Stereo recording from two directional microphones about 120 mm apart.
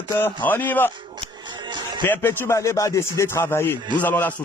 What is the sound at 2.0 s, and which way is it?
Speech, 20° left (ahead or behind).